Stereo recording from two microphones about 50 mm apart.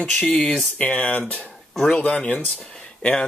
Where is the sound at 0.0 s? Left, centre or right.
Centre.